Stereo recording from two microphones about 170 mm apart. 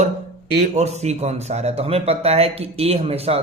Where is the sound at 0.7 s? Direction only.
40° right (ahead or behind).